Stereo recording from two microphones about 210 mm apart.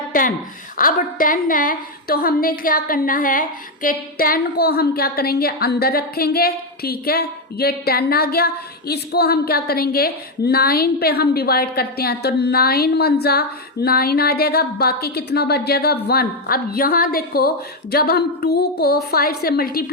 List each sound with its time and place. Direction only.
0.1 s a woman's voice: 40° left (ahead or behind)